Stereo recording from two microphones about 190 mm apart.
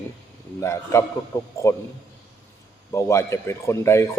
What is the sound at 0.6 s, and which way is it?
Speech, 15° left (ahead or behind).